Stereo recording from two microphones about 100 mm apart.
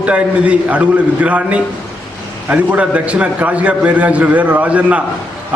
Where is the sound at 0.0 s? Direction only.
10° right (ahead or behind).